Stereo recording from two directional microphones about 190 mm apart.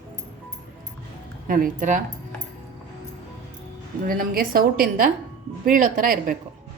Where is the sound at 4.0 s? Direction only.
50° right (ahead or behind).